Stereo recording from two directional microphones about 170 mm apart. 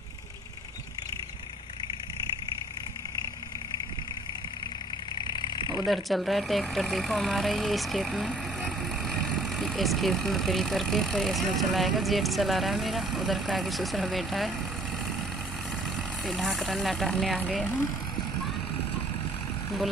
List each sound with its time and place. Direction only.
5.2 s vehicle: 25° left (ahead or behind)
5.9 s speech: centre (ahead or behind)
16.3 s speech: centre (ahead or behind)